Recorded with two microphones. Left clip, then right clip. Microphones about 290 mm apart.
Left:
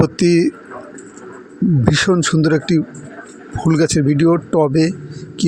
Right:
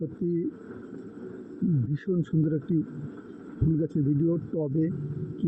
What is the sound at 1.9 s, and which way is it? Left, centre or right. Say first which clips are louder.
Speech: left 17 dB; left.